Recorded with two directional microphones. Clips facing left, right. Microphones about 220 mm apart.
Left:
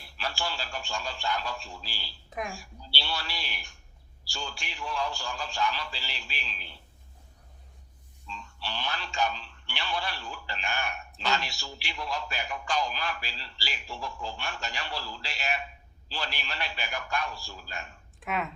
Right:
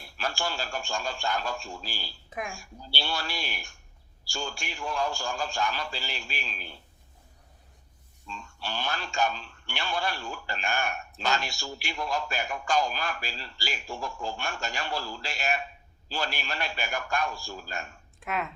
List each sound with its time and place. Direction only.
0.0 s a man's voice: 45° right (ahead or behind)
8.3 s a man's voice: 45° right (ahead or behind)
18.2 s speech: centre (ahead or behind)